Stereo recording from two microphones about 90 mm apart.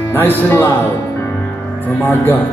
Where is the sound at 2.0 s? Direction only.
20° left (ahead or behind).